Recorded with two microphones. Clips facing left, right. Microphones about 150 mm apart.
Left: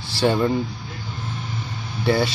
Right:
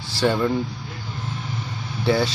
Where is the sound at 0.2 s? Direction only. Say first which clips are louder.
Left 1 dB; 10° left (ahead or behind).